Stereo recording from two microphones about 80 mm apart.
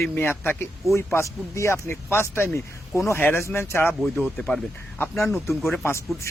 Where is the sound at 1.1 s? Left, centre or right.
Left.